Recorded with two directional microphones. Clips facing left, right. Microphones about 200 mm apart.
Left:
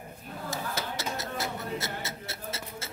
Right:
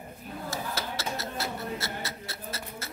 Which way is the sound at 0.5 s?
20° left (ahead or behind).